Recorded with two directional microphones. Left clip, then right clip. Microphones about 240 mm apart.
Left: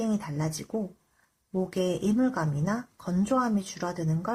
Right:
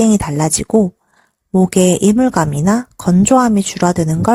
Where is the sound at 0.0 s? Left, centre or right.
Right.